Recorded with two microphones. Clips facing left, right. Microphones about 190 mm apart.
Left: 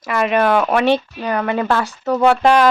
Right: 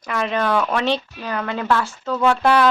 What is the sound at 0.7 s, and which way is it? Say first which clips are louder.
Speech: left 6 dB; 60° left (ahead or behind).